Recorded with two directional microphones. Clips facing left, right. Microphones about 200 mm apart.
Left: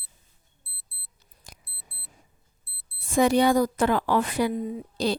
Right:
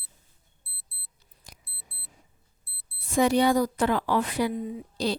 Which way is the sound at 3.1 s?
50° left (ahead or behind).